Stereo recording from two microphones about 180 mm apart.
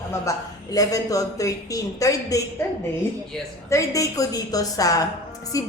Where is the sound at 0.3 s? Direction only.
20° left (ahead or behind).